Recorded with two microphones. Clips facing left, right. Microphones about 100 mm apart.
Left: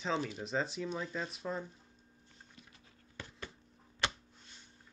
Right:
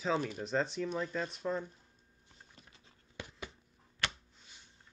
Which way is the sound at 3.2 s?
15° right (ahead or behind).